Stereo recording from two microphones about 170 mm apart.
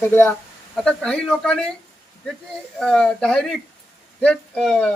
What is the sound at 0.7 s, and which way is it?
Speech, 5° left (ahead or behind).